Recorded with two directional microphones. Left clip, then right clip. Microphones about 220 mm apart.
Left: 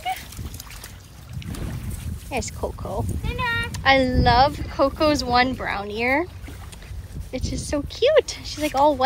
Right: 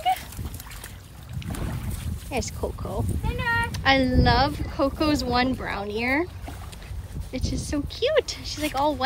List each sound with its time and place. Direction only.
2.2 s speech: 10° right (ahead or behind)
3.3 s speech: 15° left (ahead or behind)
3.7 s speech: 5° right (ahead or behind)
7.2 s speech: centre (ahead or behind)